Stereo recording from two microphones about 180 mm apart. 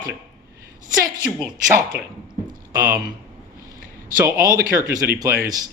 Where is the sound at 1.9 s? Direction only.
65° right (ahead or behind).